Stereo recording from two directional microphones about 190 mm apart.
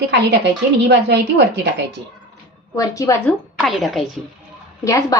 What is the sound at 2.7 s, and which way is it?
Speech, 15° left (ahead or behind).